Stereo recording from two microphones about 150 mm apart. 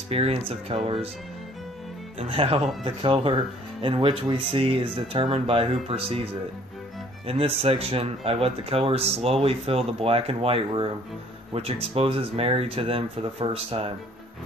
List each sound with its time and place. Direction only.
0.1 s speech: 40° right (ahead or behind)
2.1 s speech: 40° right (ahead or behind)